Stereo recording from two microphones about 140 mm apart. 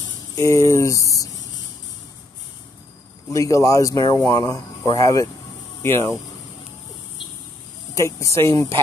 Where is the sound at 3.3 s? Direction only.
25° left (ahead or behind).